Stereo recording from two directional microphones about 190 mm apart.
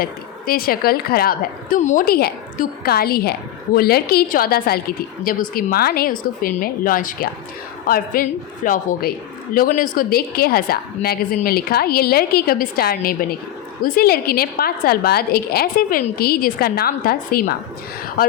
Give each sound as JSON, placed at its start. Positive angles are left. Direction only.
{"t": 0.0, "sound": "a woman's voice", "side_deg": 50}